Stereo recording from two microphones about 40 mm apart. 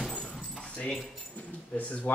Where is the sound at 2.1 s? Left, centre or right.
Left.